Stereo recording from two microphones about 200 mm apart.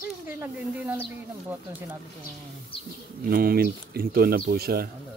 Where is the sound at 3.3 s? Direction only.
50° right (ahead or behind).